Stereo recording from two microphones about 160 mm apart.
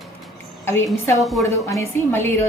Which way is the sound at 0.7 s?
15° left (ahead or behind).